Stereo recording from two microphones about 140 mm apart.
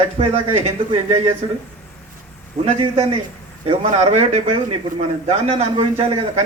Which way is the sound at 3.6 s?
50° right (ahead or behind).